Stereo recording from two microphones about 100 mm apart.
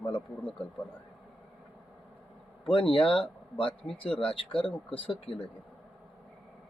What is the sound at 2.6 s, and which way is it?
Speech, 65° left (ahead or behind).